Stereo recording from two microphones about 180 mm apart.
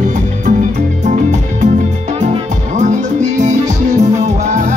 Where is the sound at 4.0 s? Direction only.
40° right (ahead or behind).